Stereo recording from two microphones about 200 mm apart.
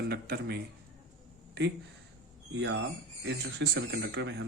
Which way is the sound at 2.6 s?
65° right (ahead or behind).